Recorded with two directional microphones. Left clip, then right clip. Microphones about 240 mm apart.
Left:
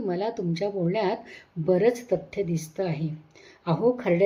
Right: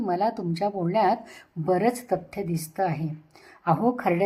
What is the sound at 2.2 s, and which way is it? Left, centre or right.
Speech, right.